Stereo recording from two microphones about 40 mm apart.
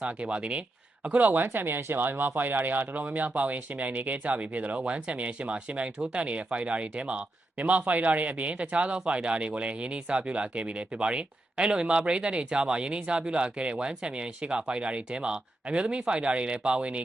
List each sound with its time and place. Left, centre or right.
0.0 s speech: right
1.5 s speech: right
4.8 s speech: right
7.6 s speech: right